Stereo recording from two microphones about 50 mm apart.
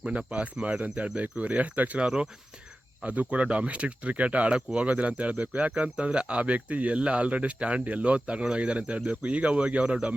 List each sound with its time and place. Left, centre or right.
0.0 s speech: centre
2.0 s speech: centre